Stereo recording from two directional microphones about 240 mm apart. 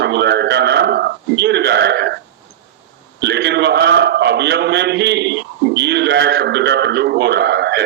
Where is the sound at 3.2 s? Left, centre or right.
Right.